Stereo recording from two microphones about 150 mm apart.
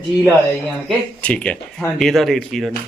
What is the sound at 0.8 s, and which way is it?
Speech, 10° left (ahead or behind).